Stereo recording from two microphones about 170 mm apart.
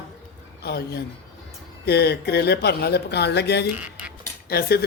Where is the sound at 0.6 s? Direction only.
70° left (ahead or behind).